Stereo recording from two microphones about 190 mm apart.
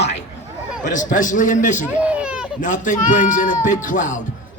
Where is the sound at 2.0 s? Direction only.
5° right (ahead or behind).